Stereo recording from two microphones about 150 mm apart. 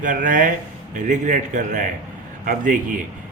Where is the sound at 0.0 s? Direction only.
60° right (ahead or behind).